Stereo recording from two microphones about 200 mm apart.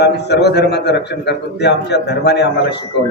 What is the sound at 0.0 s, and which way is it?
A man's voice, 55° left (ahead or behind).